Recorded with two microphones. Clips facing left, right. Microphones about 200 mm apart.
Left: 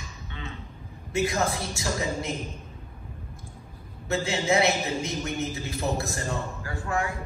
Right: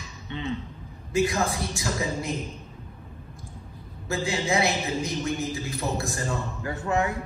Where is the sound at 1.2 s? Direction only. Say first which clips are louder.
Even; 30° left (ahead or behind).